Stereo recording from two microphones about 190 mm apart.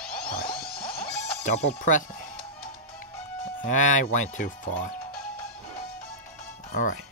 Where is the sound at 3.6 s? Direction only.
40° left (ahead or behind).